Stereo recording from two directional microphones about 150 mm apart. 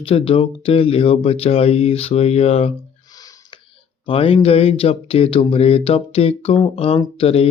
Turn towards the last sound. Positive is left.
turn(degrees=40)  # may be behind; listen again after turning